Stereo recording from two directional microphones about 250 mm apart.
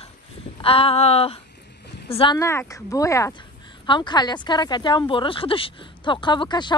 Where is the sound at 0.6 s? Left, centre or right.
Left.